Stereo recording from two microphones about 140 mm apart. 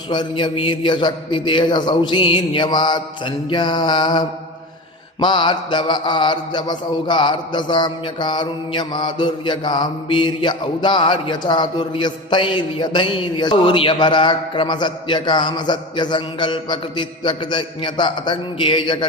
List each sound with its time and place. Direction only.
0.1 s mantra: 35° left (ahead or behind)
5.2 s mantra: 35° left (ahead or behind)